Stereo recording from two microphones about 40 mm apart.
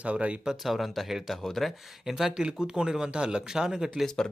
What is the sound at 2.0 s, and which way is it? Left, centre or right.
Speech, centre.